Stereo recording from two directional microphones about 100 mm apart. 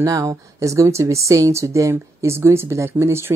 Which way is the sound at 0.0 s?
35° right (ahead or behind).